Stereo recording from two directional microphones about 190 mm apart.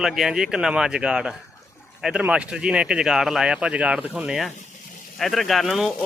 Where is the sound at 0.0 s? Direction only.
Centre (ahead or behind).